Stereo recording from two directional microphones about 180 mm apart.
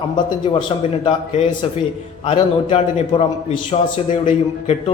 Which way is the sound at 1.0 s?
40° left (ahead or behind).